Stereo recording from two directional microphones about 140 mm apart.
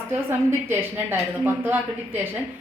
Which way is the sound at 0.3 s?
15° right (ahead or behind).